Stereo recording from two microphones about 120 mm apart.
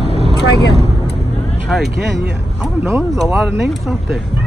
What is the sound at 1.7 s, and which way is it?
Vehicle, centre (ahead or behind).